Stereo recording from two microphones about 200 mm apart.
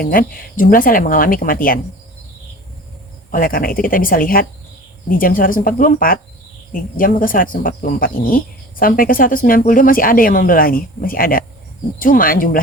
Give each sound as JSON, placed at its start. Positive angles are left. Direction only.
{"t": 0.0, "sound": "speech", "side_deg": 45}
{"t": 3.3, "sound": "speech", "side_deg": 45}